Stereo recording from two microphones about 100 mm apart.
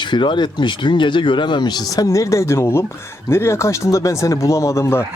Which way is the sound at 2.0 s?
30° left (ahead or behind).